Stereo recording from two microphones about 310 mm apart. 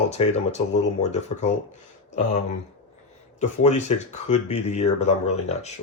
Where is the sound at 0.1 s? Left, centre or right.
Left.